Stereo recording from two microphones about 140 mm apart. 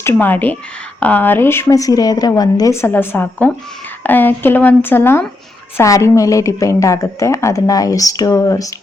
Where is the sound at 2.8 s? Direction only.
15° left (ahead or behind).